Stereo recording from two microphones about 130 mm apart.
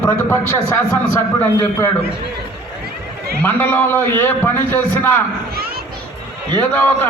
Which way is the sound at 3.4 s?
15° left (ahead or behind).